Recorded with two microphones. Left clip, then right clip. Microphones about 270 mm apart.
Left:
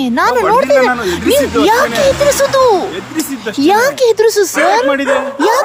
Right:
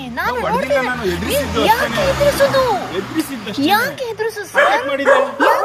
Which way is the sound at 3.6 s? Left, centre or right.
Centre.